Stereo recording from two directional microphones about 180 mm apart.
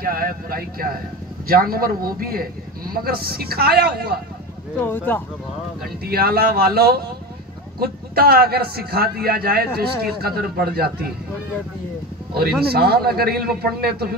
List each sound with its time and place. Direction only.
0.0 s a man's voice: 55° right (ahead or behind)
4.8 s speech: 10° left (ahead or behind)
6.0 s a man's voice: 60° right (ahead or behind)
12.7 s a man's voice: 60° right (ahead or behind)